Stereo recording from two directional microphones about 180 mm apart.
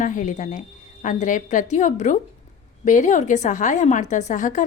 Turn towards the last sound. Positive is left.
turn(degrees=45)  # may be behind; listen again after turning